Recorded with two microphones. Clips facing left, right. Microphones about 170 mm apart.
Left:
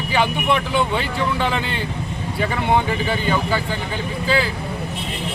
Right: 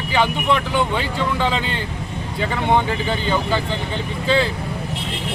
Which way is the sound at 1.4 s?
15° right (ahead or behind).